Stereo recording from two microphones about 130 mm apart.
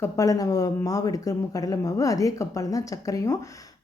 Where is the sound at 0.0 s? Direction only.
25° left (ahead or behind).